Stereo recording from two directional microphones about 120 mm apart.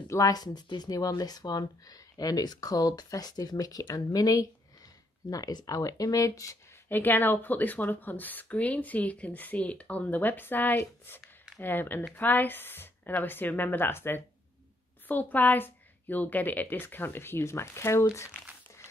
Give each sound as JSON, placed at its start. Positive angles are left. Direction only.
{"t": 0.1, "sound": "speech", "side_deg": 30}
{"t": 7.0, "sound": "speech", "side_deg": 15}
{"t": 18.1, "sound": "crumpling", "side_deg": 25}